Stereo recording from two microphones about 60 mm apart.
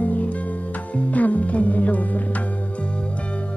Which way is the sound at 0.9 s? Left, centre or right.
Left.